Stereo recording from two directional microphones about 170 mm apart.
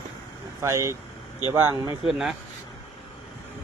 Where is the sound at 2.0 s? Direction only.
Centre (ahead or behind).